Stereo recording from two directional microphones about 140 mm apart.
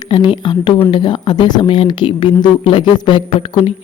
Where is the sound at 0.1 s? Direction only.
35° left (ahead or behind).